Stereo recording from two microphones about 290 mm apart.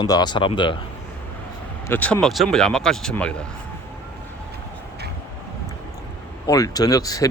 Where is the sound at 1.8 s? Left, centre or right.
Centre.